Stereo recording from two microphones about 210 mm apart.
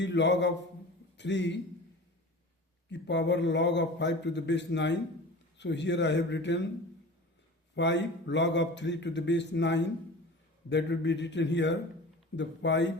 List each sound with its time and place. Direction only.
0.0 s a man's voice: 55° left (ahead or behind)
2.9 s speech: 55° left (ahead or behind)
7.8 s speech: 55° left (ahead or behind)